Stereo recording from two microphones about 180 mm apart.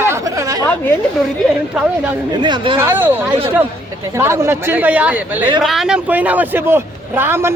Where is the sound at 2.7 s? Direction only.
10° right (ahead or behind).